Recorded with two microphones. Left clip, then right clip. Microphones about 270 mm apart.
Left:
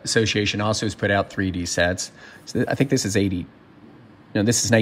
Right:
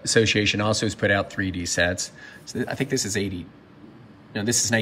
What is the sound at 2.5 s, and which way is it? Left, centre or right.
Speech, left.